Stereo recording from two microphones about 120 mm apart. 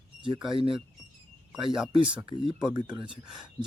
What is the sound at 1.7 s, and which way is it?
Speech, 5° right (ahead or behind).